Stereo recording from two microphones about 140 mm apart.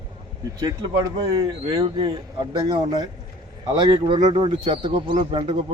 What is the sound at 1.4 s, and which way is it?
Speech, 30° right (ahead or behind).